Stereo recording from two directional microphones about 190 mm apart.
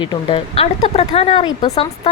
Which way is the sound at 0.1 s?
30° left (ahead or behind).